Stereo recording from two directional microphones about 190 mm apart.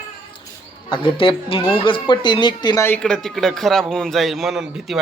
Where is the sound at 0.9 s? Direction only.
30° left (ahead or behind).